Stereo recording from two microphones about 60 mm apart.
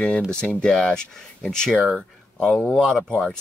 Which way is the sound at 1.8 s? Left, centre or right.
Centre.